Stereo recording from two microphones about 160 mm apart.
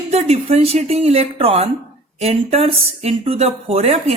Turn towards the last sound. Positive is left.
turn(degrees=-40)  # may be behind; listen again after turning